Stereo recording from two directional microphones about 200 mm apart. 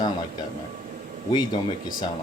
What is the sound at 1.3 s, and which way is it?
Speech, 20° left (ahead or behind).